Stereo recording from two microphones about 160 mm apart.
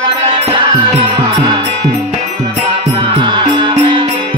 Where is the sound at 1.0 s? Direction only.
30° right (ahead or behind).